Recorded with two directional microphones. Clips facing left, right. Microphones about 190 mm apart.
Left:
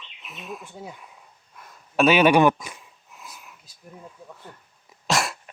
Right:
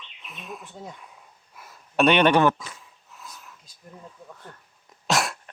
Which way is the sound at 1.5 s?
5° right (ahead or behind).